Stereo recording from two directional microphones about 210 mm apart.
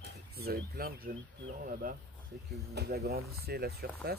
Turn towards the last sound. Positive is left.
turn(degrees=-50)  # may be behind; listen again after turning